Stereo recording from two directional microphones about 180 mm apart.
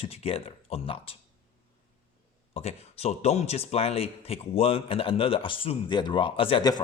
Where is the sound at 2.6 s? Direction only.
35° left (ahead or behind).